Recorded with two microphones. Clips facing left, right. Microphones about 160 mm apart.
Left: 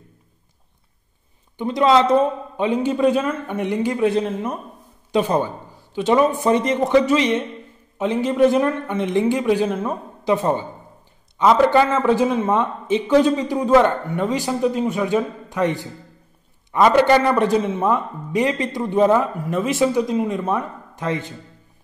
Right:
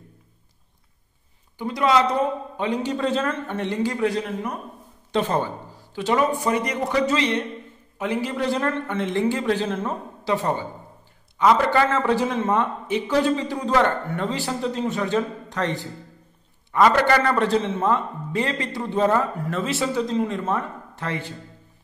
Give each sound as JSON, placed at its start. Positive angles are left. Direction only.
{"t": 1.6, "sound": "a man's voice", "side_deg": 25}